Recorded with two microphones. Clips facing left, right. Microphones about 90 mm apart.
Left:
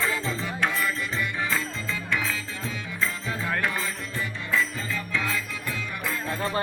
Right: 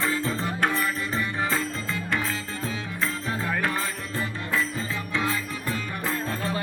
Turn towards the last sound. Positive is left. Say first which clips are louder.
# right 2 dB
turn(degrees=-30)  # may be behind; listen again after turning